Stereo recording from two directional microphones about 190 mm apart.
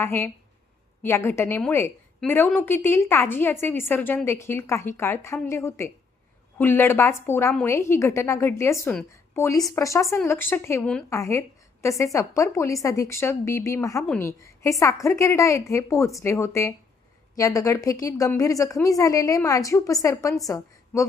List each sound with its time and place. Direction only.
0.0 s a woman's voice: 10° left (ahead or behind)